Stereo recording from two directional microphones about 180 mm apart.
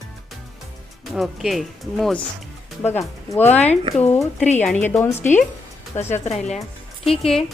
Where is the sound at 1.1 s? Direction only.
Centre (ahead or behind).